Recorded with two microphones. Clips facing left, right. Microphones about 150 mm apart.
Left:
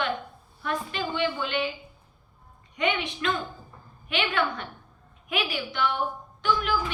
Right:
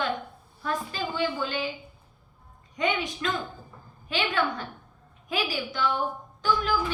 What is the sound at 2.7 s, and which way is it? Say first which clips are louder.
Speech: even; 40° right (ahead or behind).